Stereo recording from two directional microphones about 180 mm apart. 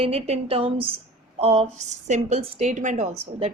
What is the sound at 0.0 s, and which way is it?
A woman's voice, 35° right (ahead or behind).